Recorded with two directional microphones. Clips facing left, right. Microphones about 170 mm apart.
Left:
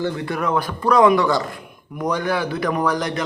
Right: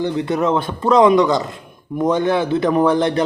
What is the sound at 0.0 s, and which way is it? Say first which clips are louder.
Speech: right 5 dB; 20° right (ahead or behind).